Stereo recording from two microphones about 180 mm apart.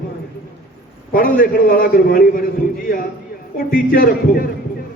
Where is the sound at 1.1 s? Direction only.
50° left (ahead or behind).